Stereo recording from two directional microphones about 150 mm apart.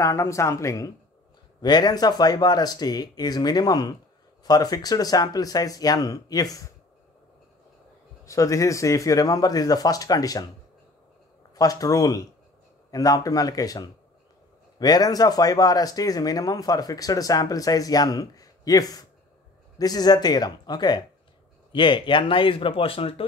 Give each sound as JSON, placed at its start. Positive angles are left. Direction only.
{"t": 0.0, "sound": "speech", "side_deg": 20}
{"t": 8.3, "sound": "speech", "side_deg": 20}
{"t": 11.5, "sound": "speech", "side_deg": 25}